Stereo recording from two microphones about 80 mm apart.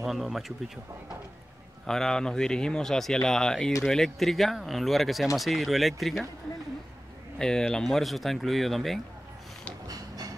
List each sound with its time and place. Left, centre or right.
0.0 s speech: centre
1.9 s speech: centre
7.3 s speech: centre
9.8 s a sound: right